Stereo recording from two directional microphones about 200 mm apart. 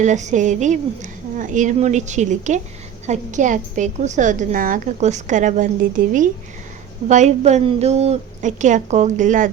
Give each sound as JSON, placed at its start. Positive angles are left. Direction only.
{"t": 0.0, "sound": "a woman's voice", "side_deg": -35}